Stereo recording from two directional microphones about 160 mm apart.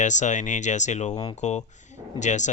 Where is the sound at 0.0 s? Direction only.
50° left (ahead or behind).